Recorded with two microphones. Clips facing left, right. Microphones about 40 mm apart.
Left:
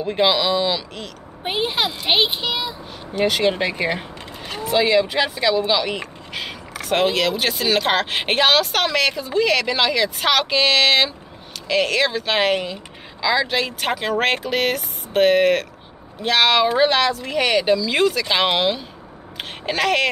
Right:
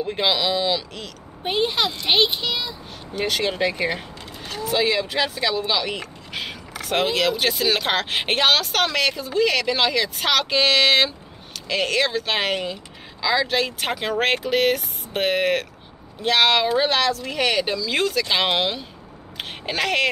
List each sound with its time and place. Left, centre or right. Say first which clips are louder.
0.0 s speech: left 3 dB; centre